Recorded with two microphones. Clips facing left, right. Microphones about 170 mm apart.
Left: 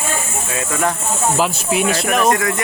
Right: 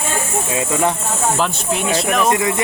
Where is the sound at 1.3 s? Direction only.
5° left (ahead or behind).